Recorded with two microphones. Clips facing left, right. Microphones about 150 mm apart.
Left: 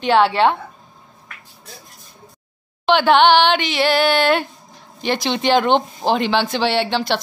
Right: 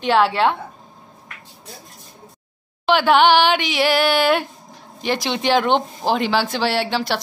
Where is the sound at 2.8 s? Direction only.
5° right (ahead or behind).